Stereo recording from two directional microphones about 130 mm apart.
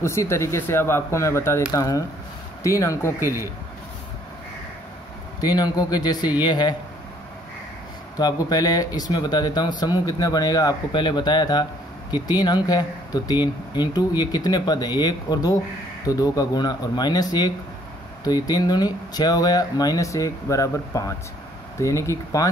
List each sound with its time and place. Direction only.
0.0 s speech: 20° left (ahead or behind)
5.4 s speech: 30° left (ahead or behind)
8.2 s speech: 30° left (ahead or behind)